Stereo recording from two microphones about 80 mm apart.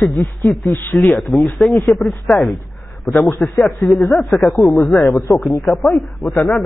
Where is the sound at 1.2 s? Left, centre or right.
Centre.